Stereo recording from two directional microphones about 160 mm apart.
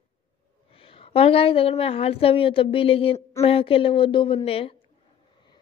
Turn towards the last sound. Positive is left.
turn(degrees=35)  # may be behind; listen again after turning